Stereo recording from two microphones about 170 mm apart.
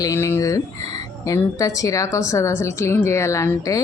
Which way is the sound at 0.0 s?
15° left (ahead or behind).